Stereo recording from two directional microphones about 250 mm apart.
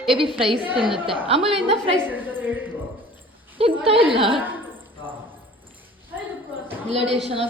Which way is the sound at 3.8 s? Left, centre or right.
Right.